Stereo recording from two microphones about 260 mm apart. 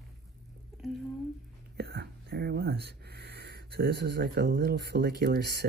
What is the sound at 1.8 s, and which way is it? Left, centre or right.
Speech, right.